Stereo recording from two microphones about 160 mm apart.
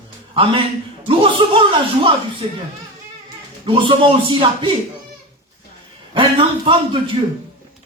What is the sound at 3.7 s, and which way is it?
Speech, 30° right (ahead or behind).